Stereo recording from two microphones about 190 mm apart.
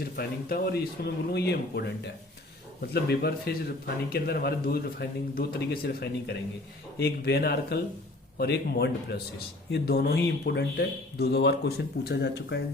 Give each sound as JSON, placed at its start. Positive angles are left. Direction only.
{"t": 0.0, "sound": "a man's voice", "side_deg": 55}